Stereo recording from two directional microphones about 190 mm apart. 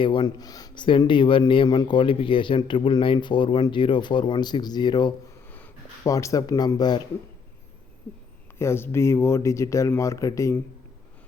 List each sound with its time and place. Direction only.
0.0 s speech: 25° left (ahead or behind)
5.5 s a sound: 10° left (ahead or behind)
6.0 s speech: 15° left (ahead or behind)
8.5 s speech: 15° left (ahead or behind)